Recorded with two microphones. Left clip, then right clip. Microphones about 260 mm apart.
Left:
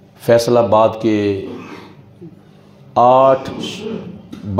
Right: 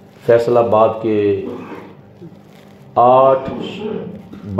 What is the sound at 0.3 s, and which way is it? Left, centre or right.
Speech, left.